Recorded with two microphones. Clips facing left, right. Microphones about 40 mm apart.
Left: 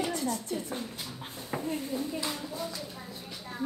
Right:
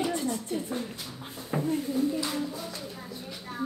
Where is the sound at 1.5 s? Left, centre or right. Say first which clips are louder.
Right 5 dB; centre.